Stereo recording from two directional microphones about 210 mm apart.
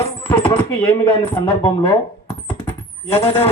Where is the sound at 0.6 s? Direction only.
10° left (ahead or behind).